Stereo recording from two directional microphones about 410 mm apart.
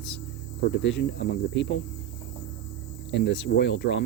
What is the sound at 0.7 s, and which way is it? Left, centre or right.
Speech, left.